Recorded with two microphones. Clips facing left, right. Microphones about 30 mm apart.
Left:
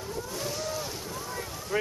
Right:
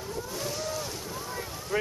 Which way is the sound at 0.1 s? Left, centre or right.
Centre.